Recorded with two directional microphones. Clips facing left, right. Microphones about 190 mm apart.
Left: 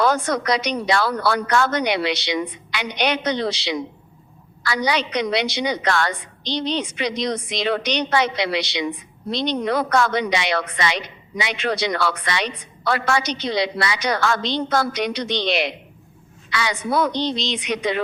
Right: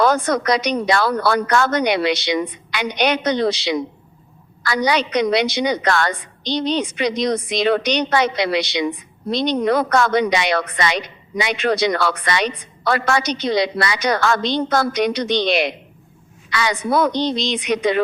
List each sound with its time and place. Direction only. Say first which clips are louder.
0.0 s a woman's voice: right 3 dB; 45° right (ahead or behind)